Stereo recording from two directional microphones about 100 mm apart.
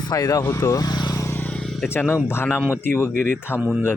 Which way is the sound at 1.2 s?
25° left (ahead or behind).